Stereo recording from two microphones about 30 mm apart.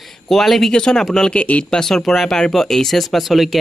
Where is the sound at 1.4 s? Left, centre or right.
Left.